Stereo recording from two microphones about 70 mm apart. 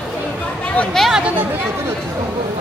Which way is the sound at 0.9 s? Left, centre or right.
Centre.